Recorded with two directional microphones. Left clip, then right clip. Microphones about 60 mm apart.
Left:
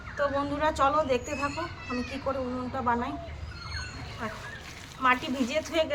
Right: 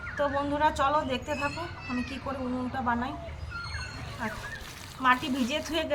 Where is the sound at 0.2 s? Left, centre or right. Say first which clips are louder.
Right 1 dB; left.